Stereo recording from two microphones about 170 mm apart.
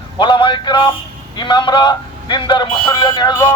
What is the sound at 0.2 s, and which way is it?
Speech, 30° left (ahead or behind).